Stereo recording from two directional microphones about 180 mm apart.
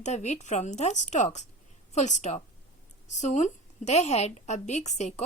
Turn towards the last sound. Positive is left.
turn(degrees=40)  # may be behind; listen again after turning